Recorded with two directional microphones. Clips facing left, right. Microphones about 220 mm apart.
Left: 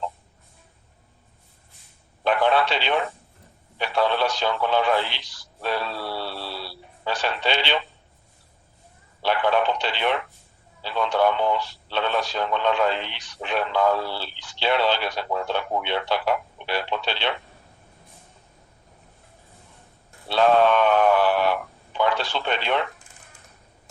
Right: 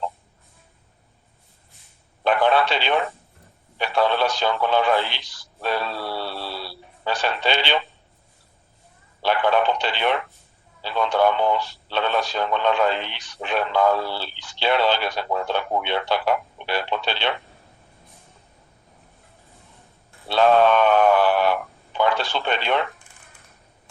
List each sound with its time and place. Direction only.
2.2 s radio: 50° right (ahead or behind)
3.8 s speech: 50° right (ahead or behind)
5.6 s a sound: 50° right (ahead or behind)
9.2 s speech: 50° right (ahead or behind)
20.6 s a sound: 50° right (ahead or behind)
21.9 s speech: 55° right (ahead or behind)